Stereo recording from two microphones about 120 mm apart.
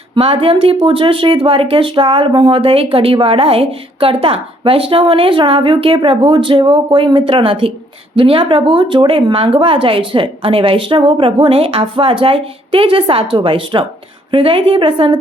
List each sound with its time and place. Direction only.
0.1 s speech: 50° right (ahead or behind)